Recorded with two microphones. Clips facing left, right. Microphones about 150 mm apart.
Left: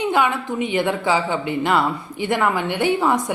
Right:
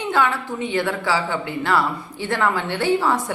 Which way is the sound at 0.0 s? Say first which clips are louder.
Left 2 dB; 15° left (ahead or behind).